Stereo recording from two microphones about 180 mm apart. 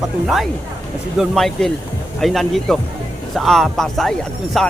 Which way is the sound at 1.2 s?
Centre (ahead or behind).